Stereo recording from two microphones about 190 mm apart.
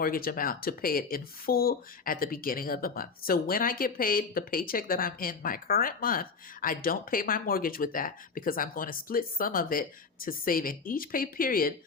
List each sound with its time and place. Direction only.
0.0 s speech: 50° left (ahead or behind)